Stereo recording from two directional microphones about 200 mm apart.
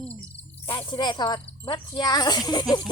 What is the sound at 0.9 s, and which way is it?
Speech, 20° left (ahead or behind).